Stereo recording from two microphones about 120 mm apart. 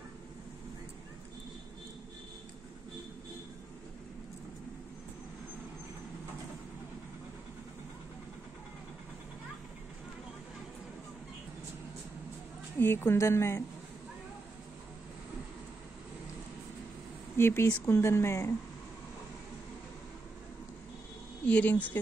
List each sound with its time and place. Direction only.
12.7 s speech: 20° left (ahead or behind)
17.4 s speech: 20° left (ahead or behind)
21.5 s speech: 10° left (ahead or behind)